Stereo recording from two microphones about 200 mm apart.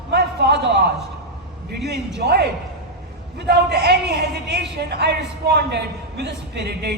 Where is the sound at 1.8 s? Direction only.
55° right (ahead or behind).